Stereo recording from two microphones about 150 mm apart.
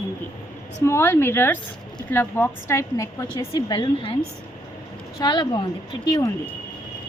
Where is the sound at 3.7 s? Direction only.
35° left (ahead or behind).